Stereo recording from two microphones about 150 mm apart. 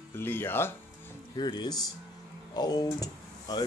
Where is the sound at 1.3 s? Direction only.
30° left (ahead or behind).